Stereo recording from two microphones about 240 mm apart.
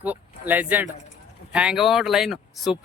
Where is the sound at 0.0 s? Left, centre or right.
Centre.